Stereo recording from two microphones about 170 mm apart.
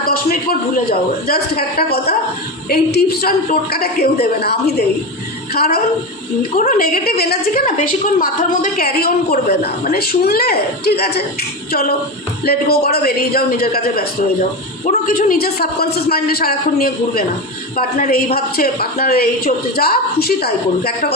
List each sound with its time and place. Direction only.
0.0 s a sound: 60° left (ahead or behind)
0.9 s a woman's voice: 60° left (ahead or behind)
14.8 s a woman's voice: 50° left (ahead or behind)